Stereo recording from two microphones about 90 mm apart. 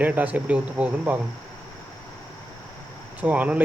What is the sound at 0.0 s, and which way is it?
Speech, 20° right (ahead or behind).